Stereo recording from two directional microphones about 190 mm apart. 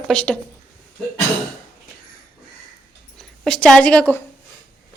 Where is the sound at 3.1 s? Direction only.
5° left (ahead or behind).